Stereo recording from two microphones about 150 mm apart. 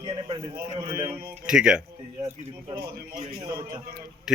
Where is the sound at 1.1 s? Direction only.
5° right (ahead or behind).